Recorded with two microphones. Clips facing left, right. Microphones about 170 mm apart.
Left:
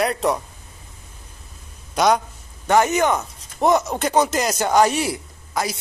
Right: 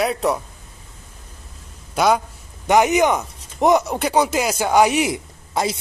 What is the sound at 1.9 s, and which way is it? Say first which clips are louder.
Speech: even; 5° right (ahead or behind).